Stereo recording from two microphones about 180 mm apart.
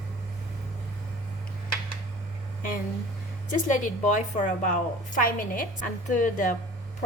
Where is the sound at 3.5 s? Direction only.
45° left (ahead or behind).